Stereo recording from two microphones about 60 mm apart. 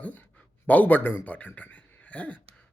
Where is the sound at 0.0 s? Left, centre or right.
Left.